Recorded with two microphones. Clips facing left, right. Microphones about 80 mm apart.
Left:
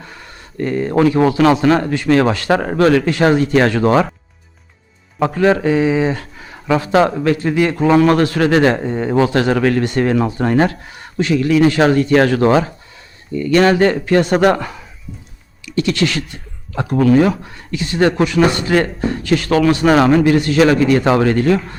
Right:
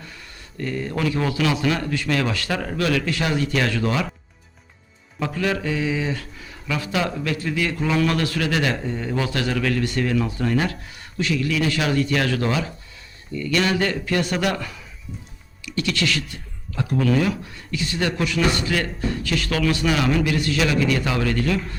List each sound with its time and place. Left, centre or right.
0.0 s a man's voice: left
5.2 s a man's voice: left
9.1 s a man's voice: left